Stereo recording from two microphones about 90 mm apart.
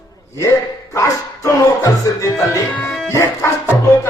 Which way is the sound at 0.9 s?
35° left (ahead or behind).